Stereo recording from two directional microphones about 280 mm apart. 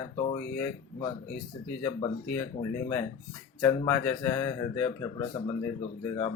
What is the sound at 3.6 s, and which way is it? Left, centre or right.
Speech, centre.